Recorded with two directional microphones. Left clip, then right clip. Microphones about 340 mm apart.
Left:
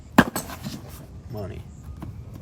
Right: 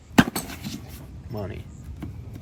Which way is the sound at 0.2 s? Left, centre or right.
Centre.